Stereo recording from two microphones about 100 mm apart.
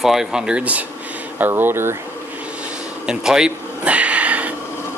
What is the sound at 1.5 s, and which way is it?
Speech, 25° right (ahead or behind).